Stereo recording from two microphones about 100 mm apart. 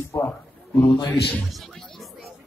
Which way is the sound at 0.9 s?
45° left (ahead or behind).